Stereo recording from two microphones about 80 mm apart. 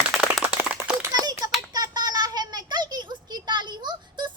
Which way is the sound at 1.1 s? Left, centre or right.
Right.